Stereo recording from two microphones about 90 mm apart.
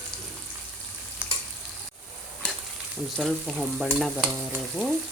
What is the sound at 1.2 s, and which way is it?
Frying, 15° right (ahead or behind).